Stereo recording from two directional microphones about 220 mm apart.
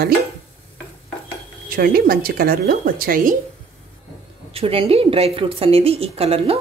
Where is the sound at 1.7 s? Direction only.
40° right (ahead or behind).